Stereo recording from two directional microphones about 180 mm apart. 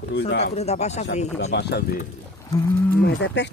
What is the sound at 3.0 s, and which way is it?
Speech, 75° left (ahead or behind).